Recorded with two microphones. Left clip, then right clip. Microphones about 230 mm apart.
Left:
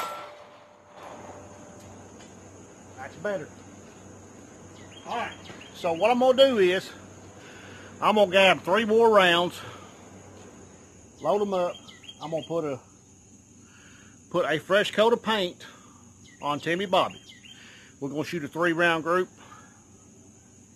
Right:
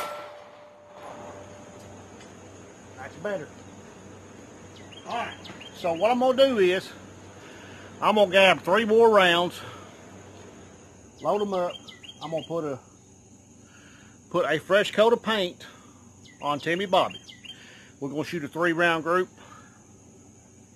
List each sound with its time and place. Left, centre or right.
3.0 s speech: centre
5.7 s a man's voice: left; by 9.0 s centre
9.0 s speech: centre
11.2 s speech: centre
14.3 s speech: centre